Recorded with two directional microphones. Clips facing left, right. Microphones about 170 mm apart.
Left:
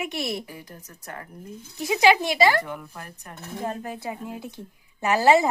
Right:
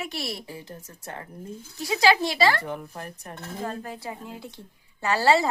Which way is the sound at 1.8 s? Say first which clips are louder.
Left 2 dB; 20° left (ahead or behind).